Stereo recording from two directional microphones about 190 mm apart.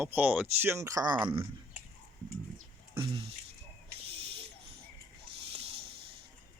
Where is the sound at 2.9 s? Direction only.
25° right (ahead or behind).